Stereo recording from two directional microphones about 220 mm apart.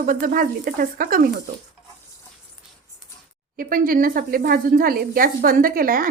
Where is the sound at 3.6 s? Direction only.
40° right (ahead or behind).